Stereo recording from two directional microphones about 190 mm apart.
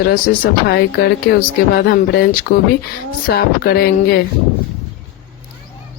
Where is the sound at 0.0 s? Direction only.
55° left (ahead or behind).